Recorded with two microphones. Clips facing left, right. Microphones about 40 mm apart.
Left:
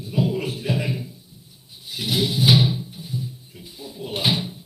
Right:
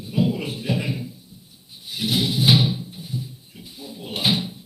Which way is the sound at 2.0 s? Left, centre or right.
Centre.